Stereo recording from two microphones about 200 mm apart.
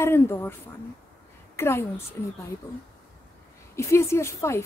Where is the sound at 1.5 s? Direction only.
10° left (ahead or behind).